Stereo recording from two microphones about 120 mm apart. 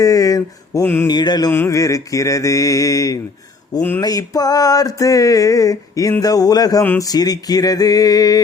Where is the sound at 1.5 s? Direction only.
20° left (ahead or behind).